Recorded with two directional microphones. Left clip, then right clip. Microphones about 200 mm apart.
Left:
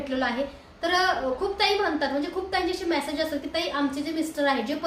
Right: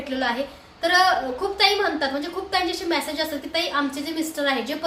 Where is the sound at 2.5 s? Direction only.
5° right (ahead or behind).